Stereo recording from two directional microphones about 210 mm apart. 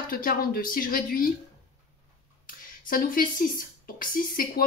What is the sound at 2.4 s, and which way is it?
Speech, 40° left (ahead or behind).